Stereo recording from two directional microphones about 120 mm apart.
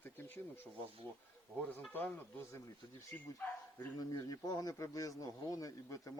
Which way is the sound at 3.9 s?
30° left (ahead or behind).